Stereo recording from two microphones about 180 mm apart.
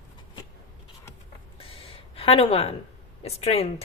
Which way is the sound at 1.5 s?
30° left (ahead or behind).